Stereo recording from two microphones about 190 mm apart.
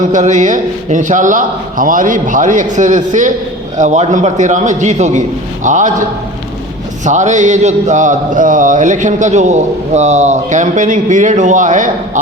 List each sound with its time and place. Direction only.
0.1 s speech: 40° right (ahead or behind)